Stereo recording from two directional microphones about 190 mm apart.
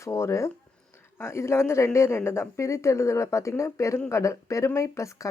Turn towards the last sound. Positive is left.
turn(degrees=15)  # may be behind; listen again after turning